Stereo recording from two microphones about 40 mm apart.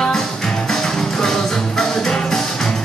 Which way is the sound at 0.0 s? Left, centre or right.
Centre.